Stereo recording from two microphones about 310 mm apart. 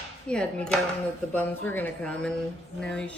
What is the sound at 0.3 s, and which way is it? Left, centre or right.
A woman's voice, centre.